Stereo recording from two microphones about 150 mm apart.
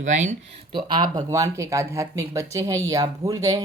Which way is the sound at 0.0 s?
55° right (ahead or behind).